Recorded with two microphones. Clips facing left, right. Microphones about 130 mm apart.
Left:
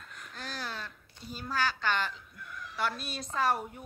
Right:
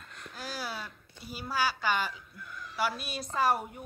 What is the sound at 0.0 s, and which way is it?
A woman's voice, centre (ahead or behind).